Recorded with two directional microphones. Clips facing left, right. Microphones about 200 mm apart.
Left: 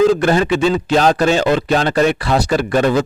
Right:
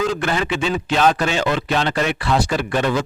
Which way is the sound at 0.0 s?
35° left (ahead or behind).